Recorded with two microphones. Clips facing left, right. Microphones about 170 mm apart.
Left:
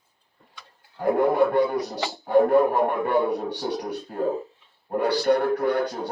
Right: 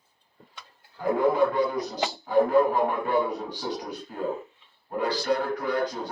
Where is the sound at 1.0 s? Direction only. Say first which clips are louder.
Left 2 dB; 60° left (ahead or behind).